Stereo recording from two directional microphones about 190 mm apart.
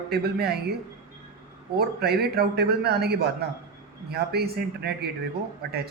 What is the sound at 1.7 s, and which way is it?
A man's voice, 55° right (ahead or behind).